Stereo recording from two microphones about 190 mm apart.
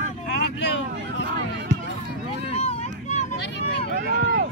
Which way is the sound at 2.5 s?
35° left (ahead or behind).